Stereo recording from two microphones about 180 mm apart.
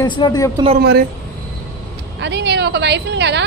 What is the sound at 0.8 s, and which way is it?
Speech, 60° right (ahead or behind).